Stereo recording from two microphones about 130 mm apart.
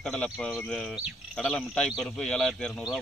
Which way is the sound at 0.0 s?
5° left (ahead or behind).